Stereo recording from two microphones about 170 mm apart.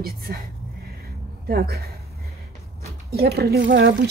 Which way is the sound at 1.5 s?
65° right (ahead or behind).